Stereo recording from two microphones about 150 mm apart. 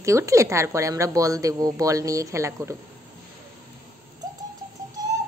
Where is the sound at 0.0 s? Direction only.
20° right (ahead or behind).